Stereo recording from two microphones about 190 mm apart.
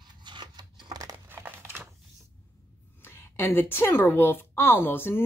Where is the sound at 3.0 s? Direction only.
10° left (ahead or behind).